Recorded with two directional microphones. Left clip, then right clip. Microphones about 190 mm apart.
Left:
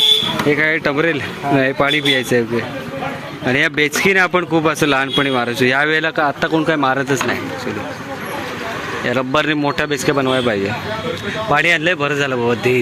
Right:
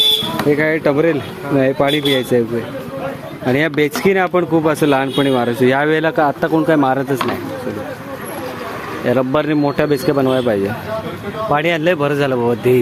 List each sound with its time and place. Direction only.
0.4 s speech: 10° right (ahead or behind)
3.4 s speech: 10° right (ahead or behind)
9.0 s speech: 10° right (ahead or behind)
11.5 s speech: 15° right (ahead or behind)